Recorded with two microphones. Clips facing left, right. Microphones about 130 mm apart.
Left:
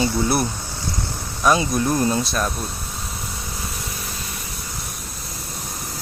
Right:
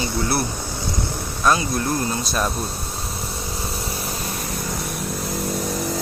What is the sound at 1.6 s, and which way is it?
Speech, 25° left (ahead or behind).